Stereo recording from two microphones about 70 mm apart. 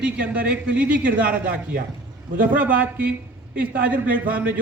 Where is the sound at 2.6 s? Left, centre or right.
Right.